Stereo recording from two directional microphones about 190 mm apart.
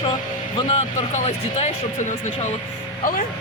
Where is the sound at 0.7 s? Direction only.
35° left (ahead or behind).